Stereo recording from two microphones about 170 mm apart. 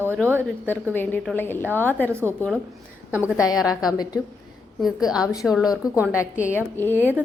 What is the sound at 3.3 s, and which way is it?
Speech, 20° left (ahead or behind).